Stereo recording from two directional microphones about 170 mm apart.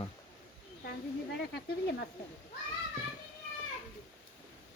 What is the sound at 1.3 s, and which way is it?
Speech, 75° left (ahead or behind).